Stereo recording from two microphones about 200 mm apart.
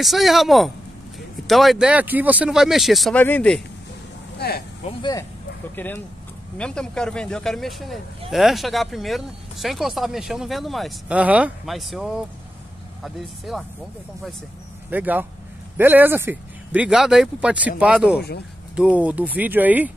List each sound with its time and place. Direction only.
0.0 s speech: centre (ahead or behind)
4.4 s speech: 50° left (ahead or behind)
4.8 s speech: 20° left (ahead or behind)
5.8 s speech: 10° left (ahead or behind)
14.9 s speech: 10° right (ahead or behind)